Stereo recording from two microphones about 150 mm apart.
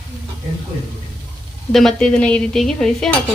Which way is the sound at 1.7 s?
5° left (ahead or behind).